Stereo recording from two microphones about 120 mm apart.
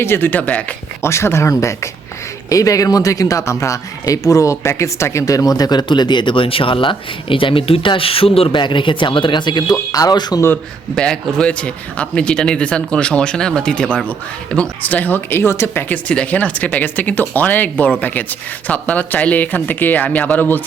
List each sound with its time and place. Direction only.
0.0 s speech: 20° left (ahead or behind); by 10.4 s 35° left (ahead or behind)
10.9 s speech: 5° left (ahead or behind)